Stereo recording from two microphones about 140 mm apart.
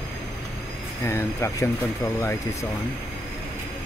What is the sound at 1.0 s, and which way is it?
Speech, 20° left (ahead or behind).